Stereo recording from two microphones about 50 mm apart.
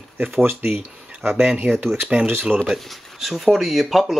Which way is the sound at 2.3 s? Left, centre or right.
Right.